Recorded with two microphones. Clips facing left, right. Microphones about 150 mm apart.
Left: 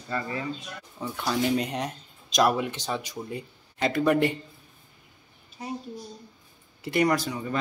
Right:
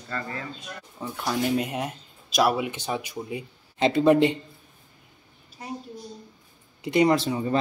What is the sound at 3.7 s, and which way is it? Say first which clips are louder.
Speech: right 4 dB; 25° right (ahead or behind).